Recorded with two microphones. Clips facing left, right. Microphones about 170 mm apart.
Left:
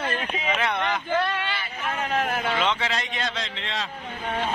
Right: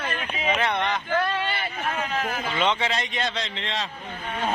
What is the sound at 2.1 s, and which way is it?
Speech, 55° left (ahead or behind).